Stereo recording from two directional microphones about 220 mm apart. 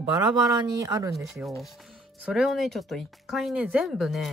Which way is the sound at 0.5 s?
15° right (ahead or behind).